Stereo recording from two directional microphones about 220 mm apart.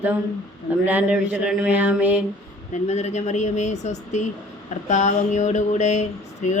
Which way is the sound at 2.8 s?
30° left (ahead or behind).